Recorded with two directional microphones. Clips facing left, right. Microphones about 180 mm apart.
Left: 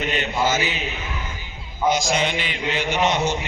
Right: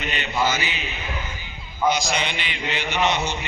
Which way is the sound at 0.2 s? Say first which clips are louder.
Even; 45° left (ahead or behind).